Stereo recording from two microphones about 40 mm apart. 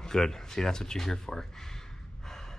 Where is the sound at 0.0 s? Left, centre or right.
Centre.